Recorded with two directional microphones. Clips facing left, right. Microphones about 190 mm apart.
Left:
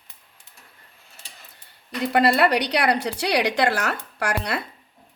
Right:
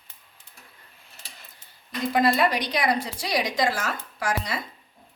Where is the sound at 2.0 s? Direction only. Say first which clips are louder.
Left 3 dB; 70° left (ahead or behind).